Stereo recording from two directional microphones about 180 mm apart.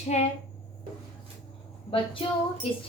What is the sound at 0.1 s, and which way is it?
Speech, 40° left (ahead or behind).